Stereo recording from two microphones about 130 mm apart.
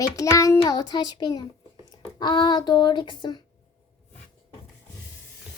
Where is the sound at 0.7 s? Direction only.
30° left (ahead or behind).